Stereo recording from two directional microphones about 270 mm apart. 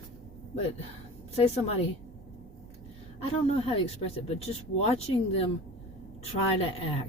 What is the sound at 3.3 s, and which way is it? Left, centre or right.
Speech, left.